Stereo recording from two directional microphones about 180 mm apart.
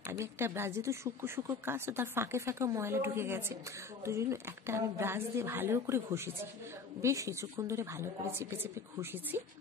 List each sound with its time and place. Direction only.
0.1 s speech: 15° right (ahead or behind)